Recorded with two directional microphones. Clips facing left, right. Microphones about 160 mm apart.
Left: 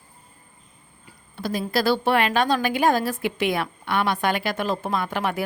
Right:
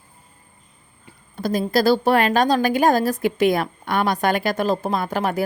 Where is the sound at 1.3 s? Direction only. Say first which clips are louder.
Right 5 dB; 45° right (ahead or behind).